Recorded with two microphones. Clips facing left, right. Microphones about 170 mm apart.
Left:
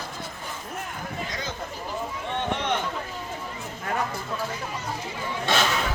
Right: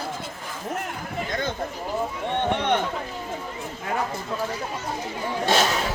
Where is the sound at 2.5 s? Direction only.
55° right (ahead or behind).